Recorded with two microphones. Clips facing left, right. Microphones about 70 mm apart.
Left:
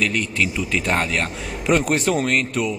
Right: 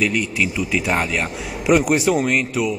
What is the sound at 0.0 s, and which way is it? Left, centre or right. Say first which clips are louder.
A man's voice: right 1 dB; centre.